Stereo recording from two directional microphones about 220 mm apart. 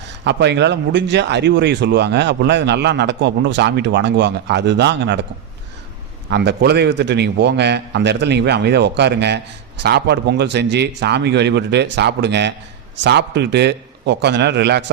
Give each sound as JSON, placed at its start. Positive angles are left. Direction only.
{"t": 0.3, "sound": "speech", "side_deg": -50}
{"t": 6.3, "sound": "speech", "side_deg": -50}